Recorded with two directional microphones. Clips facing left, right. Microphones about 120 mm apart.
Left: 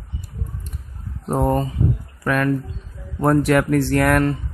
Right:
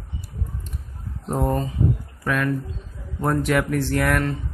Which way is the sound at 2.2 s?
50° left (ahead or behind).